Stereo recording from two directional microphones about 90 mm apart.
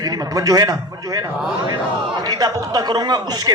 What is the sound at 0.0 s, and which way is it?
Speech, 45° right (ahead or behind).